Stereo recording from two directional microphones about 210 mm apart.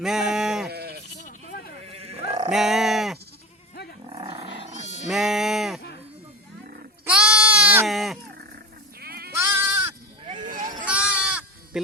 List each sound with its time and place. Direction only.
0.0 s speech: centre (ahead or behind)
0.7 s sheep: 50° right (ahead or behind)
1.9 s sheep: 30° right (ahead or behind)
2.5 s speech: centre (ahead or behind)
4.1 s wild animals: 25° right (ahead or behind)
5.0 s sheep: centre (ahead or behind)
7.0 s goat: 5° right (ahead or behind)
8.4 s sheep: 45° right (ahead or behind)
9.3 s sheep: 10° right (ahead or behind)
10.2 s a sound: 30° right (ahead or behind)
10.5 s a sound: 40° right (ahead or behind)
10.8 s sheep: 5° right (ahead or behind)
11.3 s goat: 5° right (ahead or behind)